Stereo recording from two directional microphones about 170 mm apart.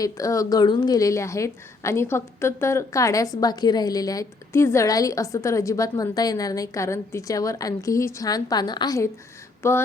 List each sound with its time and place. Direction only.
0.0 s a woman's voice: 20° left (ahead or behind)